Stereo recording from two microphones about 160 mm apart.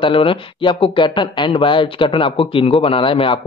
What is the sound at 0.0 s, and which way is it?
Speech, 35° left (ahead or behind).